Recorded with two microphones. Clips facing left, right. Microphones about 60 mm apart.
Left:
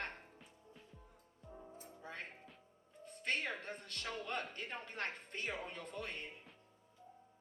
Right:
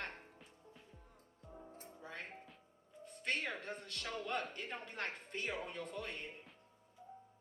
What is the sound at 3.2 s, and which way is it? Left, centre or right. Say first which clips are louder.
Music: even; left.